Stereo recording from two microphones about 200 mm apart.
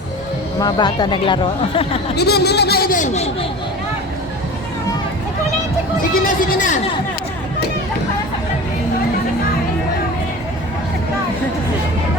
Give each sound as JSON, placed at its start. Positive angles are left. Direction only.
{"t": 0.6, "sound": "speech", "side_deg": 20}
{"t": 2.1, "sound": "a man's voice", "side_deg": 55}
{"t": 6.2, "sound": "speech", "side_deg": 40}